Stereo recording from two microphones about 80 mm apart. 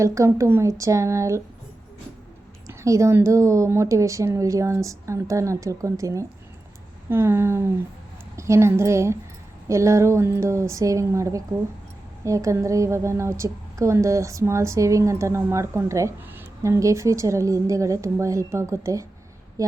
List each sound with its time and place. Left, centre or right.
0.0 s a woman's voice: right
2.6 s a sound: right
3.2 s a woman's voice: right